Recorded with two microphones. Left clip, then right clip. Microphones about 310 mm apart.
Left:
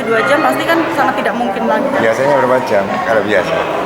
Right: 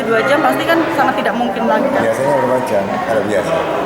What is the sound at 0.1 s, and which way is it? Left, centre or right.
Speech, centre.